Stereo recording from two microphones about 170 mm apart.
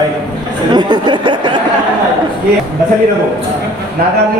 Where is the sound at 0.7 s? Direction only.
25° right (ahead or behind).